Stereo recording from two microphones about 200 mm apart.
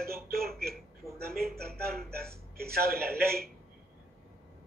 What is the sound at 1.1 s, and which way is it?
Speech, 50° right (ahead or behind).